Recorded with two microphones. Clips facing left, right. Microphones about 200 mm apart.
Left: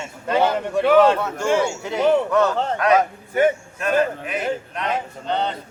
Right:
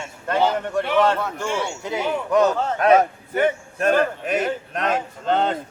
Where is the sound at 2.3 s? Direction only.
15° right (ahead or behind).